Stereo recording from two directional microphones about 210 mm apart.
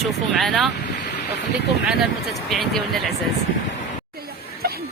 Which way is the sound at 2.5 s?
Centre (ahead or behind).